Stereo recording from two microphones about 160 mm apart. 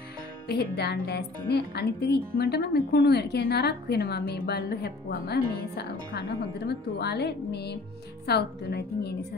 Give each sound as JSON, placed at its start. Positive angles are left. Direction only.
{"t": 0.5, "sound": "a woman's voice", "side_deg": 85}